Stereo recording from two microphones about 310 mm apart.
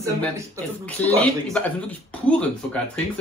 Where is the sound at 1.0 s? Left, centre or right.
Centre.